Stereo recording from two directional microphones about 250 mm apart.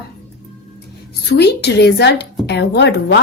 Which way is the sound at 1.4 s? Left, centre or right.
Left.